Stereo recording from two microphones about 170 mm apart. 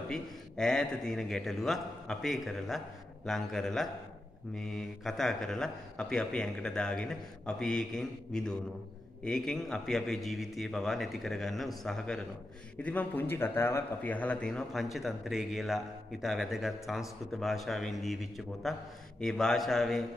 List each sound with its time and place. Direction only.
0.1 s a man's voice: 5° left (ahead or behind)